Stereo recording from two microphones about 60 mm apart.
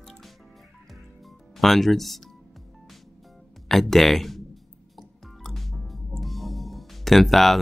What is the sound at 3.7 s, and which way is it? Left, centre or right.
Speech, centre.